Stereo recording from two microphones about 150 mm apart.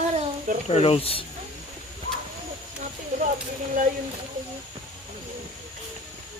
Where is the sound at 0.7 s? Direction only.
40° left (ahead or behind).